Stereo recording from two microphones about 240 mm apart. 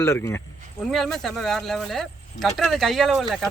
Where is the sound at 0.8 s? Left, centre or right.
Centre.